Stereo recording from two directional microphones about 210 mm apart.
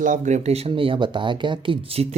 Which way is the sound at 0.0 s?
35° right (ahead or behind).